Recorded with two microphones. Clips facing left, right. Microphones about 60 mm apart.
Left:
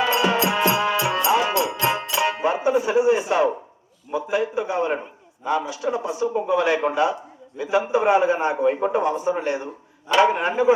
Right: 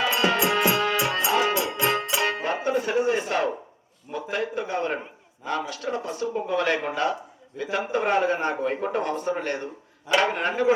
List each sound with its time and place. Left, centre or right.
0.1 s music: left
2.2 s a man's voice: centre